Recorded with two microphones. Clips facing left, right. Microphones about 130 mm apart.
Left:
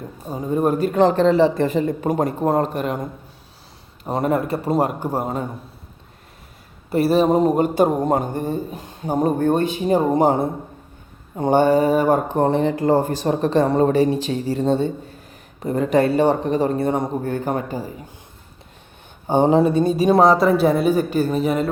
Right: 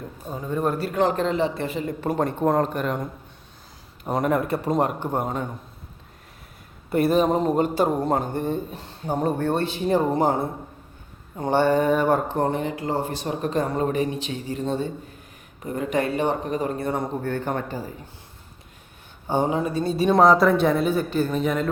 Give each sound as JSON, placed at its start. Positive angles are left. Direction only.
{"t": 0.3, "sound": "speech", "side_deg": 15}
{"t": 0.9, "sound": "speech", "side_deg": 30}
{"t": 2.0, "sound": "speech", "side_deg": 15}
{"t": 4.3, "sound": "a man's voice", "side_deg": 0}
{"t": 7.2, "sound": "speech", "side_deg": 10}
{"t": 12.5, "sound": "speech", "side_deg": 30}
{"t": 12.7, "sound": "speech", "side_deg": 45}
{"t": 19.5, "sound": "speech", "side_deg": 35}
{"t": 19.7, "sound": "speech", "side_deg": 15}